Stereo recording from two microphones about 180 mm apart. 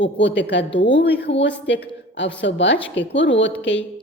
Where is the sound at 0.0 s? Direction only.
90° left.